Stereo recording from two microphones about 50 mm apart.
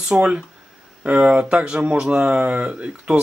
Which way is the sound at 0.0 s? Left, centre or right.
Centre.